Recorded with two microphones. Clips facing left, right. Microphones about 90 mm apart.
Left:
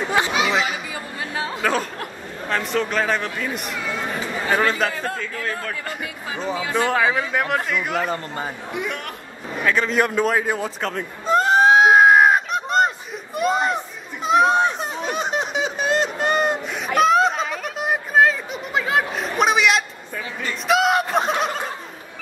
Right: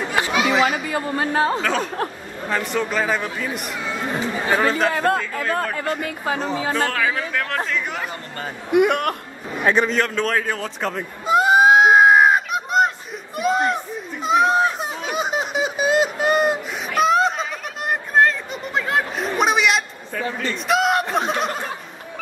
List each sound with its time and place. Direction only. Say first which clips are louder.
0.1 s chatter: left 2 dB; 25° left (ahead or behind)
0.7 s chatter: right 6 dB; 55° right (ahead or behind)
1.6 s a man's voice: right 1 dB; centre (ahead or behind)
5.0 s a man's voice: right 7 dB; 60° right (ahead or behind)
6.0 s speech: right 4 dB; 50° right (ahead or behind)
6.7 s speech: left 4 dB; 20° left (ahead or behind)
8.7 s a man's voice: right 14 dB; 60° right (ahead or behind)
9.9 s a man's voice: left 2 dB; 10° left (ahead or behind)
10.8 s a sound: right 1 dB; 5° right (ahead or behind)
20.6 s speech: left 1 dB; centre (ahead or behind)